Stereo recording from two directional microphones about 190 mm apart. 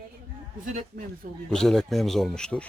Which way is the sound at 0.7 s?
50° right (ahead or behind).